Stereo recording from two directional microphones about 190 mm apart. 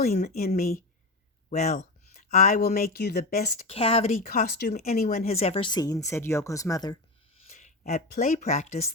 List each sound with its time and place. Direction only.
0.3 s speech: 55° left (ahead or behind)
1.5 s speech: 40° left (ahead or behind)
3.7 s speech: 30° left (ahead or behind)
4.1 s speech: 45° left (ahead or behind)
4.7 s speech: 40° left (ahead or behind); by 6.9 s 20° left (ahead or behind)
7.4 s a sound: 35° left (ahead or behind)
8.1 s speech: 45° left (ahead or behind)